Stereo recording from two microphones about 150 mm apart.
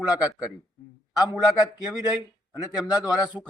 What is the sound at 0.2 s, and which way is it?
Speech, 5° right (ahead or behind).